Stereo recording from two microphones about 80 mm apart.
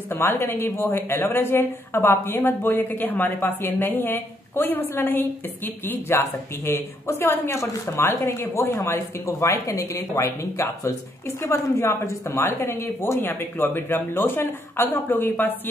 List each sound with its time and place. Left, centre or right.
0.1 s a woman's voice: left